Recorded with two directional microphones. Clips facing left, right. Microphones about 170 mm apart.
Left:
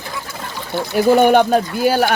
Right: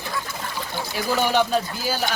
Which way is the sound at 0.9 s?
55° left (ahead or behind).